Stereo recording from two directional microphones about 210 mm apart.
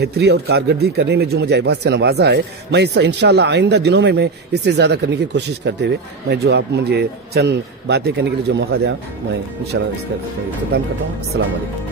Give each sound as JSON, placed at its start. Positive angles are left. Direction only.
{"t": 0.0, "sound": "speech", "side_deg": -50}